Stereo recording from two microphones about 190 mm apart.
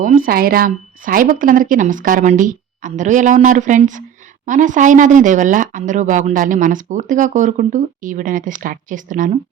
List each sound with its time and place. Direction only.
0.0 s speech: 50° right (ahead or behind)